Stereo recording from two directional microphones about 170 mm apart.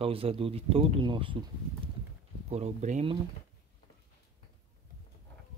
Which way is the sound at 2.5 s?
40° right (ahead or behind).